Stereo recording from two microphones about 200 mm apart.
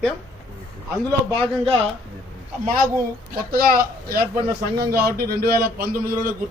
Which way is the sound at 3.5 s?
50° right (ahead or behind).